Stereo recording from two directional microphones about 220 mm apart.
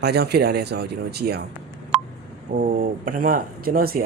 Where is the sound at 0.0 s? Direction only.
45° right (ahead or behind).